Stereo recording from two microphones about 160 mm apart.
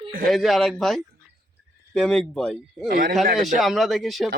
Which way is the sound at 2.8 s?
65° right (ahead or behind).